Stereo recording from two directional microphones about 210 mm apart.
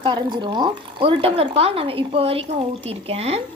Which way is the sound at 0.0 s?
20° right (ahead or behind).